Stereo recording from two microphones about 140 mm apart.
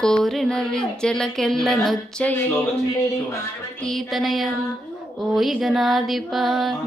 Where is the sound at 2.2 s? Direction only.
15° left (ahead or behind).